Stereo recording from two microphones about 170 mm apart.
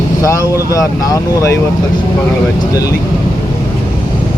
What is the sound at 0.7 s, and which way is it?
Speech, 20° left (ahead or behind).